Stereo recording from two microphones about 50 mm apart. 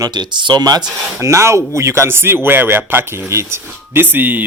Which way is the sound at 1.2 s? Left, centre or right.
Right.